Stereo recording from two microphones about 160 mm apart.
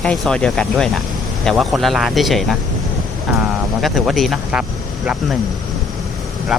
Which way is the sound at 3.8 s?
Centre (ahead or behind).